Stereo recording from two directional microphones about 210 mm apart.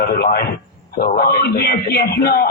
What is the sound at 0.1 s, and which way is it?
A man's voice, 50° left (ahead or behind).